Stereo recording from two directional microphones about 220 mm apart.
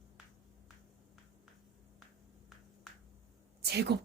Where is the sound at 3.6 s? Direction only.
45° right (ahead or behind).